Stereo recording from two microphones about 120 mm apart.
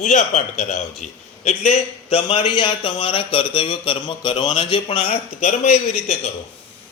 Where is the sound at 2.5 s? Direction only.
40° left (ahead or behind).